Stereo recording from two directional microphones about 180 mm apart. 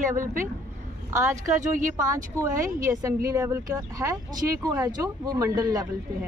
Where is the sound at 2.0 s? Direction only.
15° right (ahead or behind).